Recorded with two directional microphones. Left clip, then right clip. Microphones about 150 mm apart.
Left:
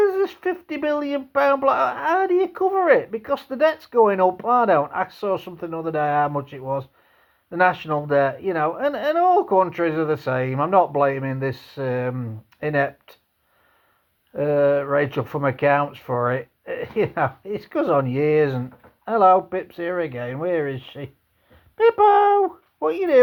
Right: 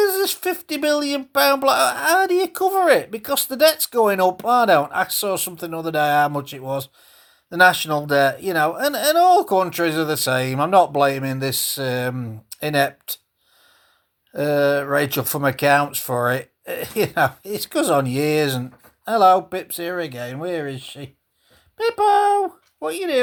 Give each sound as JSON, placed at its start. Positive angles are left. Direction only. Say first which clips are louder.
{"t": 0.3, "sound": "speech", "louder": "right 2 dB", "side_deg": -30}
{"t": 11.5, "sound": "speech", "louder": "right 17 dB", "side_deg": 5}
{"t": 11.8, "sound": "speech", "louder": "left 4 dB", "side_deg": -35}
{"t": 14.3, "sound": "speech", "louder": "even", "side_deg": -35}
{"t": 21.8, "sound": "female singing", "louder": "left 2 dB", "side_deg": -5}